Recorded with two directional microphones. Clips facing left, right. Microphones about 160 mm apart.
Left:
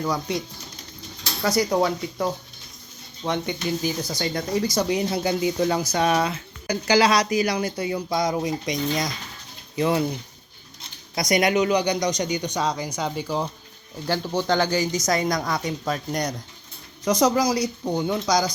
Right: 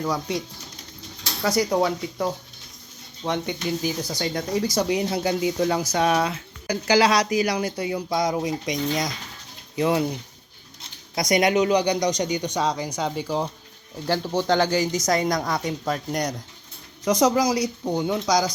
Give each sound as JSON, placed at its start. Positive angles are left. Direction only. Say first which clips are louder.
{"t": 0.0, "sound": "speech", "louder": "even", "side_deg": -5}
{"t": 14.7, "sound": "a woman's voice", "louder": "right 1 dB", "side_deg": -65}
{"t": 15.0, "sound": "speech", "louder": "right 1 dB", "side_deg": -25}